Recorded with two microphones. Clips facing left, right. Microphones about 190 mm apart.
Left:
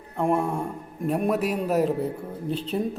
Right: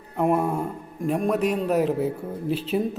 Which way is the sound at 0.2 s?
5° right (ahead or behind).